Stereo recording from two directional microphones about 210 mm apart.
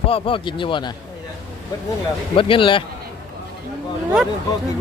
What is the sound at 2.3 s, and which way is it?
Speech, 25° left (ahead or behind).